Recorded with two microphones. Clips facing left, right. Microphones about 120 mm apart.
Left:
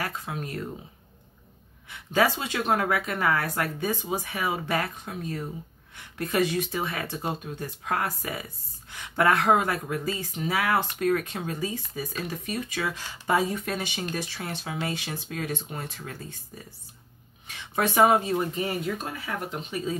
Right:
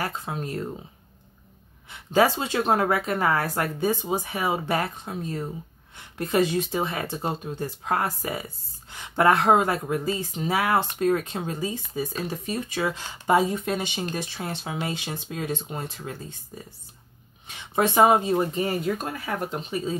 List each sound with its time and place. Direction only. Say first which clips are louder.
0.0 s speech: right 3 dB; 30° right (ahead or behind)
1.9 s speech: right 3 dB; 30° right (ahead or behind)
17.5 s speech: right 3 dB; 25° right (ahead or behind); by 19.8 s 45° right (ahead or behind)